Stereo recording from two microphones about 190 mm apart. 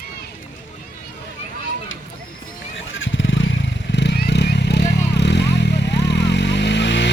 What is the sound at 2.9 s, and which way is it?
Vehicle, 80° left.